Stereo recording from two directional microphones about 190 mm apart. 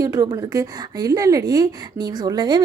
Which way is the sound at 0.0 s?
20° right (ahead or behind).